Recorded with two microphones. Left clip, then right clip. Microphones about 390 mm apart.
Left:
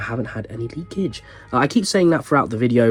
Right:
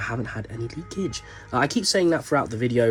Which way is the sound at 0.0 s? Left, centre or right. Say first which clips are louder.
Left 3 dB; centre.